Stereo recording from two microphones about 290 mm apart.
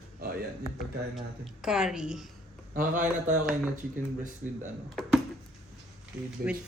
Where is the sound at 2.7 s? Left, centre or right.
Right.